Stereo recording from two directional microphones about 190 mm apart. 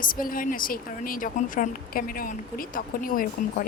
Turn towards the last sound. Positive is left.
turn(degrees=45)  # may be behind; listen again after turning